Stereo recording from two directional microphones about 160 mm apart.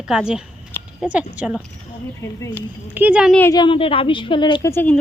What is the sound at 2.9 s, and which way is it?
Speech, 10° right (ahead or behind).